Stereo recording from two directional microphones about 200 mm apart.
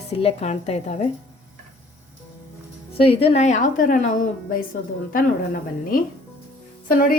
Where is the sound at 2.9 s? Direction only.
30° left (ahead or behind).